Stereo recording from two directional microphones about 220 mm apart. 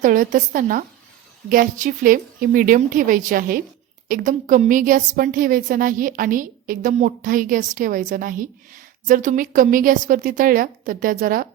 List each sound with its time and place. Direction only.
0.0 s a woman's voice: 35° right (ahead or behind)